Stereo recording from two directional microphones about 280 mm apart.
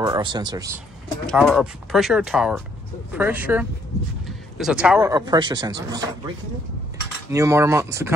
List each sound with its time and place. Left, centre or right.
0.0 s speech: centre
1.2 s speech: centre
7.2 s speech: centre